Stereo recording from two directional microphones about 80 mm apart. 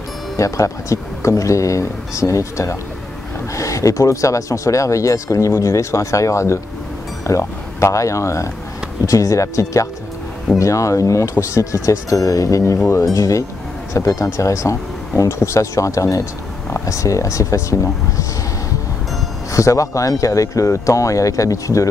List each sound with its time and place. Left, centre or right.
0.4 s speech: left
19.5 s speech: left